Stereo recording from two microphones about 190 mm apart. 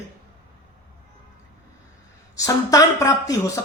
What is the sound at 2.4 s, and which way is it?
Speech, 15° left (ahead or behind).